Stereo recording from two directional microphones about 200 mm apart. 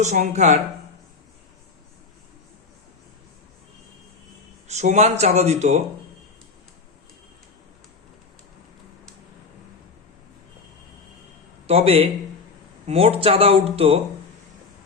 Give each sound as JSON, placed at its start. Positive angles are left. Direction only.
{"t": 0.0, "sound": "speech", "side_deg": -35}
{"t": 4.7, "sound": "speech", "side_deg": -35}
{"t": 11.6, "sound": "a man's voice", "side_deg": -30}